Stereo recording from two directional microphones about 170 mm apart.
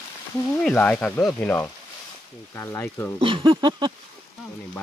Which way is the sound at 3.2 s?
30° right (ahead or behind).